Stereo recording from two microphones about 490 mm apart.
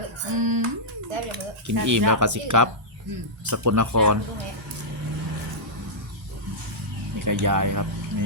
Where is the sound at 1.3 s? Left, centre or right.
Right.